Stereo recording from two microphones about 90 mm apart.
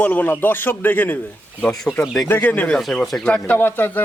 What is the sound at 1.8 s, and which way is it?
A man's voice, 5° left (ahead or behind).